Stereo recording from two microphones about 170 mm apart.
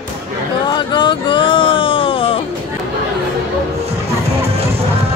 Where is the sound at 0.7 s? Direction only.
25° left (ahead or behind).